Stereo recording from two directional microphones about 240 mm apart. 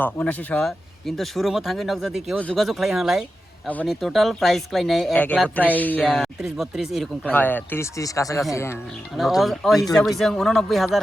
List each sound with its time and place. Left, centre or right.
0.0 s speech: centre
9.1 s speech: centre